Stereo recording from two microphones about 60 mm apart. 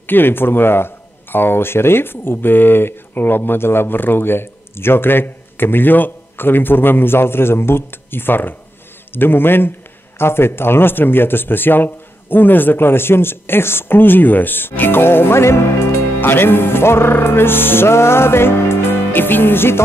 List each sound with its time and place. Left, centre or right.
0.0 s speech: left